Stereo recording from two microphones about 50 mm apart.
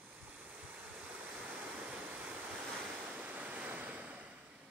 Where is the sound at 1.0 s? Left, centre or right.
Right.